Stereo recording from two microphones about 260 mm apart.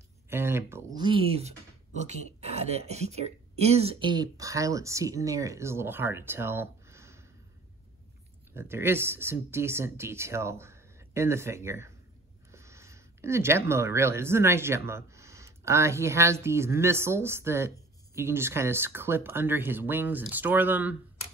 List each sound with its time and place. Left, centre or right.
0.3 s speech: centre
0.9 s a sound: centre
2.0 s speech: right; by 7.2 s centre
8.5 s speech: centre